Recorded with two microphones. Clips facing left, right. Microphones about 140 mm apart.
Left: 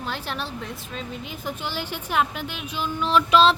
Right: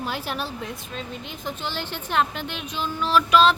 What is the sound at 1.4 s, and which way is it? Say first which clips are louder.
A woman's voice: even; 10° left (ahead or behind).